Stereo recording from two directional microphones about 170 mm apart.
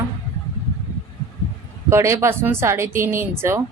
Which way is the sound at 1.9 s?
15° right (ahead or behind).